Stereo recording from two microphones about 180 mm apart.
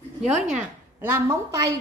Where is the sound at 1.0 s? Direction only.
15° right (ahead or behind).